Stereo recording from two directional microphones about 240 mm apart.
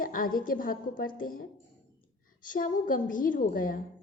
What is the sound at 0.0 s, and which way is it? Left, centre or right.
A woman's voice, left.